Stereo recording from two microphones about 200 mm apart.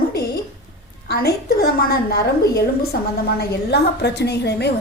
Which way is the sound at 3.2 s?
55° left (ahead or behind).